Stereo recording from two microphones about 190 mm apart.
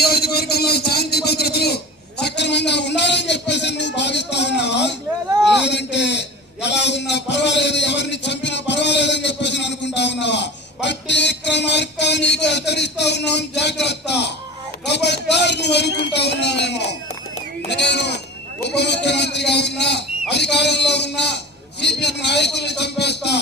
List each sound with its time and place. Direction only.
0.0 s a man's voice: 55° left (ahead or behind)
5.6 s a sound: 65° left (ahead or behind)
16.1 s a man's voice: 65° left (ahead or behind)